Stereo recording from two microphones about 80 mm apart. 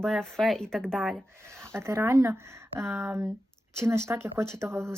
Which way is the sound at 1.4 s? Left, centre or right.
Right.